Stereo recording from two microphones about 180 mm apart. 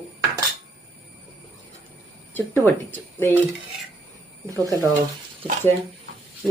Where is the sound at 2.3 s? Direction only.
10° left (ahead or behind).